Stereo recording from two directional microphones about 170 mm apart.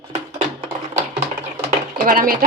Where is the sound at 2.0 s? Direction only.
55° right (ahead or behind).